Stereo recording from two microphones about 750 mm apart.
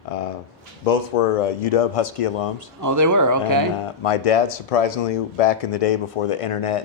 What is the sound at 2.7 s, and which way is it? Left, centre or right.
Speech, right.